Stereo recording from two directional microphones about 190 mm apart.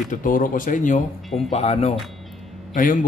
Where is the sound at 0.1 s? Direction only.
45° left (ahead or behind).